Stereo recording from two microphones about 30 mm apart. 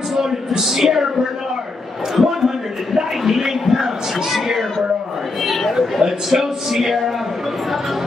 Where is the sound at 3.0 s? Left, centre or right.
Centre.